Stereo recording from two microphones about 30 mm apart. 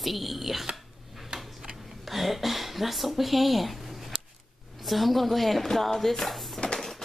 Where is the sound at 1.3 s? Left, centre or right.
Right.